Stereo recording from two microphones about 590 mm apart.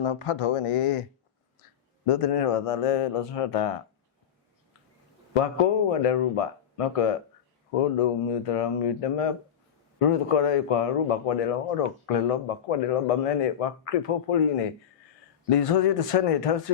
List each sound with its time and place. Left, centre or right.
0.0 s speech: left
2.0 s speech: left
5.9 s a man's voice: left